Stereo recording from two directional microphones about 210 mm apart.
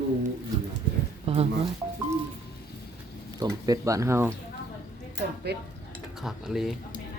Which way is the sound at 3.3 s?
15° right (ahead or behind).